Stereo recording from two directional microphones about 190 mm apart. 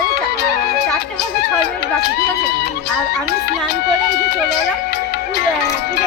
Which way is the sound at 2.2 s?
55° left (ahead or behind).